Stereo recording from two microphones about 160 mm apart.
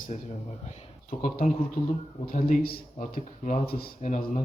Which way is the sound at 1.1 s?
55° left (ahead or behind).